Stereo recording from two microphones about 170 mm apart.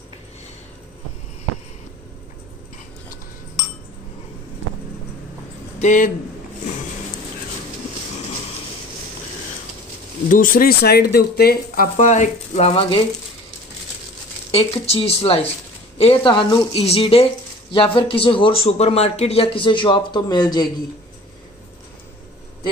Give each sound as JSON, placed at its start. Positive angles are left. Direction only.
{"t": 5.8, "sound": "speech", "side_deg": 50}
{"t": 10.3, "sound": "speech", "side_deg": 55}
{"t": 14.5, "sound": "speech", "side_deg": 35}